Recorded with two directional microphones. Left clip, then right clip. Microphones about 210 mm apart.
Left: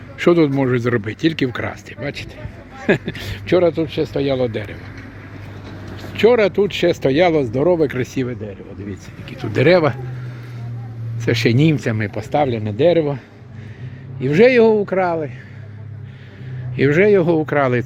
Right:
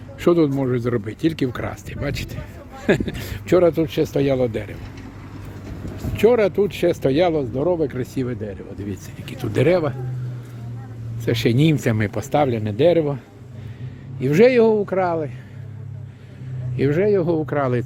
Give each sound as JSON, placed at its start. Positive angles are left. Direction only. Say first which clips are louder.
{"t": 0.2, "sound": "speech", "louder": "left 3 dB", "side_deg": 0}
{"t": 6.0, "sound": "speech", "louder": "left 3 dB", "side_deg": 5}
{"t": 7.3, "sound": "speech", "louder": "left 5 dB", "side_deg": 20}
{"t": 8.3, "sound": "speech", "louder": "even", "side_deg": -15}
{"t": 9.6, "sound": "speech", "louder": "left 6 dB", "side_deg": 10}
{"t": 11.3, "sound": "speech", "louder": "left 3 dB", "side_deg": 0}
{"t": 16.7, "sound": "speech", "louder": "left 5 dB", "side_deg": 10}